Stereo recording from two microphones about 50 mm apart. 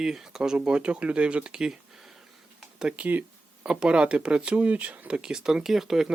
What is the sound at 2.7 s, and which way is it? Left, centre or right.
Speech, right.